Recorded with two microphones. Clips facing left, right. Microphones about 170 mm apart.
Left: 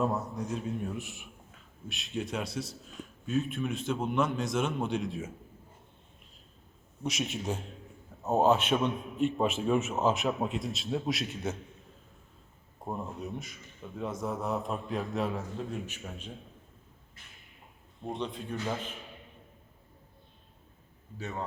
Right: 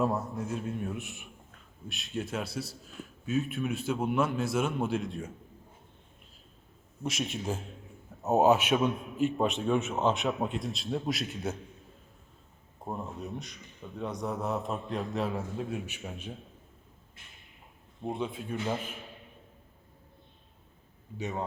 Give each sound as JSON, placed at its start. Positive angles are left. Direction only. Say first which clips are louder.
{"t": 0.0, "sound": "a man's voice", "louder": "right 1 dB", "side_deg": 0}
{"t": 7.0, "sound": "a man's voice", "louder": "even", "side_deg": 0}
{"t": 12.8, "sound": "a man's voice", "louder": "even", "side_deg": 0}
{"t": 18.0, "sound": "a man's voice", "louder": "right 2 dB", "side_deg": -5}
{"t": 21.2, "sound": "speech", "louder": "right 3 dB", "side_deg": -20}